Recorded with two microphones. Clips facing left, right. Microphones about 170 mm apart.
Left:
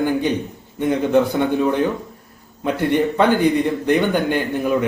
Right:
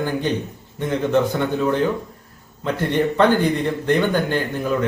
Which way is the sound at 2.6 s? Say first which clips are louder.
Left 2 dB; 15° left (ahead or behind).